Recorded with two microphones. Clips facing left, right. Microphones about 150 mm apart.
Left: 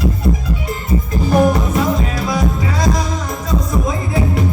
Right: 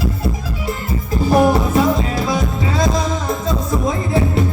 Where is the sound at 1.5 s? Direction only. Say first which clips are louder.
Right 2 dB; 30° right (ahead or behind).